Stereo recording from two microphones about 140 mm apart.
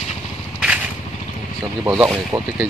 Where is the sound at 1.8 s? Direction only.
15° right (ahead or behind).